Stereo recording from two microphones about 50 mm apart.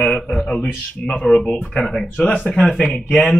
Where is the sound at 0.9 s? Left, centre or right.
Left.